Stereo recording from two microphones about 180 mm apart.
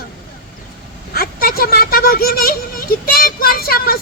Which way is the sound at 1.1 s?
55° left (ahead or behind).